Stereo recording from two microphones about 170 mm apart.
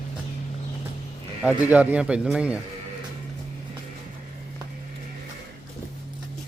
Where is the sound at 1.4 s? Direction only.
10° right (ahead or behind).